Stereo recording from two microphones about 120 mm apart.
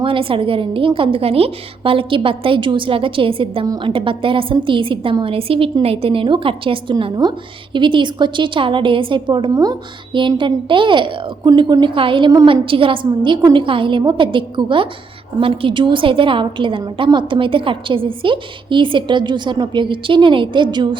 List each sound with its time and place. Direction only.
0.0 s a woman's voice: 45° right (ahead or behind)